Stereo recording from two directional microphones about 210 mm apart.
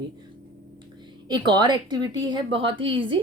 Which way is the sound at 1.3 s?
20° right (ahead or behind).